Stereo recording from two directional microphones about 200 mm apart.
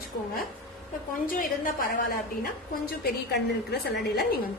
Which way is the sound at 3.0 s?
55° left (ahead or behind).